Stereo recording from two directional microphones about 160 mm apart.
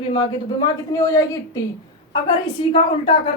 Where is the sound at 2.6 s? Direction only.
35° left (ahead or behind).